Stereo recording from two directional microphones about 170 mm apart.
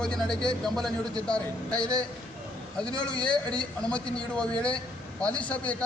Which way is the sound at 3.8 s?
5° left (ahead or behind).